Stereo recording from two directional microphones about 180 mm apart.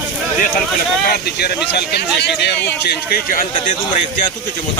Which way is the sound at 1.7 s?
65° left (ahead or behind).